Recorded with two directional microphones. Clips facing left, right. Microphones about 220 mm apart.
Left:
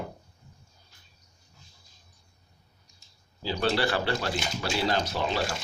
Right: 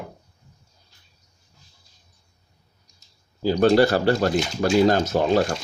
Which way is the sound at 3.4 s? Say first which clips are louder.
Right 10 dB; 45° right (ahead or behind).